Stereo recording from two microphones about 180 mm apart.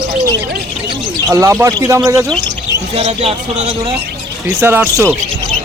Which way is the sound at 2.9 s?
35° right (ahead or behind).